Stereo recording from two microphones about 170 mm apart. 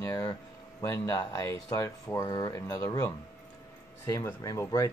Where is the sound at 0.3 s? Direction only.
20° left (ahead or behind).